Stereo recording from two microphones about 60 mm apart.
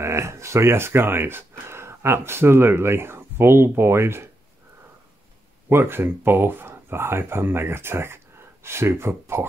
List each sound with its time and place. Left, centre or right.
0.0 s speech: right
5.7 s speech: right